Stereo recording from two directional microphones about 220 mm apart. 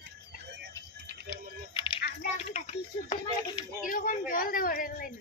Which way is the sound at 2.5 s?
30° left (ahead or behind).